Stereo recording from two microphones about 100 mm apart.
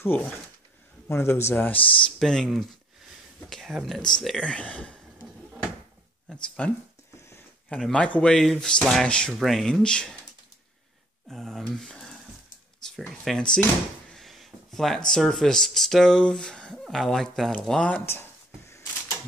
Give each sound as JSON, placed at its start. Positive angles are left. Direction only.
{"t": 0.0, "sound": "speech", "side_deg": 20}
{"t": 4.4, "sound": "speech", "side_deg": 10}
{"t": 6.2, "sound": "speech", "side_deg": 10}
{"t": 7.7, "sound": "speech", "side_deg": 10}
{"t": 11.2, "sound": "speech", "side_deg": 0}
{"t": 12.8, "sound": "a sound", "side_deg": 5}
{"t": 13.2, "sound": "speech", "side_deg": 5}
{"t": 18.0, "sound": "a sound", "side_deg": 25}